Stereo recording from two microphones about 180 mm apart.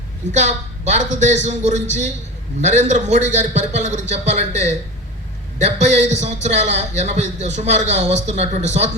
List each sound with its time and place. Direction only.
0.3 s a man's voice: 40° right (ahead or behind)